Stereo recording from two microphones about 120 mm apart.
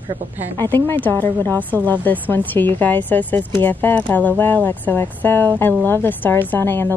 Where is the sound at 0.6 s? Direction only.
20° left (ahead or behind).